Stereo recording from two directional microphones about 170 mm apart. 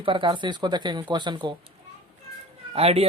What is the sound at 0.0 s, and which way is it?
Speech, 30° right (ahead or behind).